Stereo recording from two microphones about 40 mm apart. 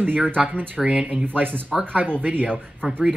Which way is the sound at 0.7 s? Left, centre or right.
Right.